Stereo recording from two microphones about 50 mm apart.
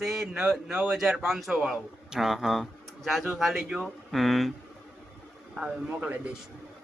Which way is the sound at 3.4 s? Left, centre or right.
Centre.